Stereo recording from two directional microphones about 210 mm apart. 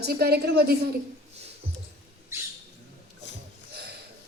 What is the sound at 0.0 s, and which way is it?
Speech, 50° right (ahead or behind).